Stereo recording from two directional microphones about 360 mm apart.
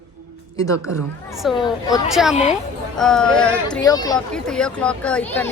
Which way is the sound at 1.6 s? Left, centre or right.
Centre.